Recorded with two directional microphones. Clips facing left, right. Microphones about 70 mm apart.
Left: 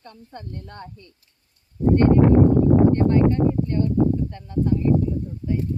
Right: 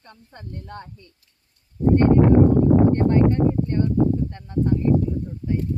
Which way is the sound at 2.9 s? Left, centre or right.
Right.